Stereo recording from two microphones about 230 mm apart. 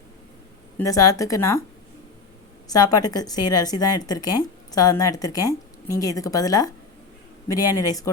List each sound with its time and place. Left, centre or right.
0.8 s a woman's voice: centre
2.6 s a woman's voice: centre